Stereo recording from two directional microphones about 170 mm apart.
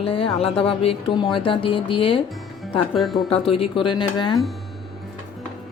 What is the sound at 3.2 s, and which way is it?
A woman's voice, 35° left (ahead or behind).